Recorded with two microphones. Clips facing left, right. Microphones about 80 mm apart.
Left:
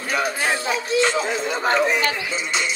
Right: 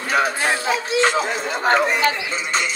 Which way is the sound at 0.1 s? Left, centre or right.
Right.